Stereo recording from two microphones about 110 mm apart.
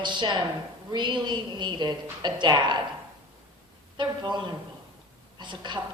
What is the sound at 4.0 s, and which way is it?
A woman's voice, 45° right (ahead or behind).